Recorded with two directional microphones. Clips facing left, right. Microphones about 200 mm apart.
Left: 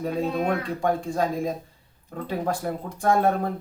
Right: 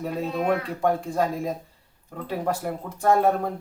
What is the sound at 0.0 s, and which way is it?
Speech, 5° right (ahead or behind).